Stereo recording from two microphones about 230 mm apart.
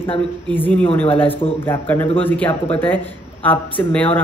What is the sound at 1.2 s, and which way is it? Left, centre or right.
Speech, left.